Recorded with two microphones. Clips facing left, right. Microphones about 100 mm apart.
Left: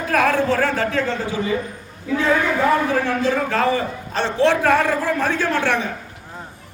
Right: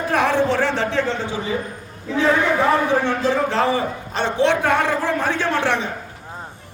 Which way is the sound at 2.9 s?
25° right (ahead or behind).